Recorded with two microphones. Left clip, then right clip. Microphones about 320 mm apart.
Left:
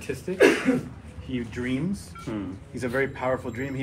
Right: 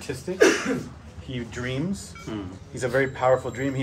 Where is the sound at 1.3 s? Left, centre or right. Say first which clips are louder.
Left 1 dB; right.